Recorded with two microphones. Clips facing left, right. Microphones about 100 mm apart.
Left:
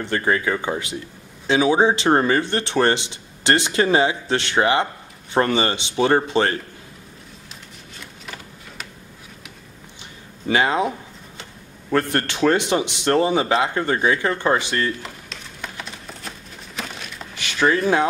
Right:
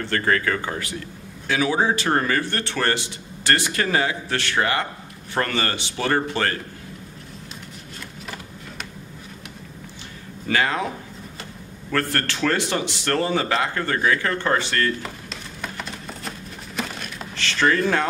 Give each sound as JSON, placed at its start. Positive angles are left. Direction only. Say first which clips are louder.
{"t": 0.0, "sound": "speech", "louder": "left 1 dB", "side_deg": 15}
{"t": 10.5, "sound": "speech", "louder": "left 3 dB", "side_deg": 20}
{"t": 11.9, "sound": "speech", "louder": "left 3 dB", "side_deg": 20}
{"t": 15.0, "sound": "a sound", "louder": "right 2 dB", "side_deg": 0}
{"t": 17.4, "sound": "speech", "louder": "left 1 dB", "side_deg": 10}